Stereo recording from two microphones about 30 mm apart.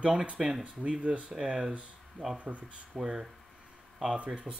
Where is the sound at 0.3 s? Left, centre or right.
Right.